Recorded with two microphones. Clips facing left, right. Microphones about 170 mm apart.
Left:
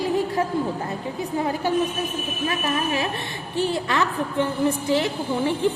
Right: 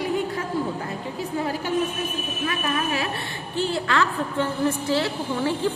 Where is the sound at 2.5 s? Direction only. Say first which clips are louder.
Left 1 dB; 25° left (ahead or behind).